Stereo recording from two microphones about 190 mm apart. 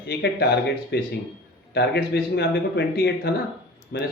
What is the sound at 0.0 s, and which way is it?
Speech, 60° left (ahead or behind).